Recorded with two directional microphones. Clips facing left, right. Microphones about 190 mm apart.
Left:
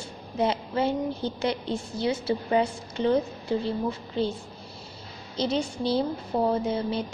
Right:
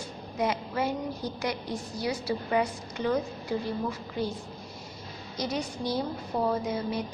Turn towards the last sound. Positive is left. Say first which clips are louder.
# left 3 dB
turn(degrees=30)  # may be behind; listen again after turning